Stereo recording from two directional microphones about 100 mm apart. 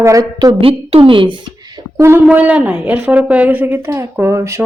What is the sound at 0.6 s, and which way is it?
Speech, 65° right (ahead or behind).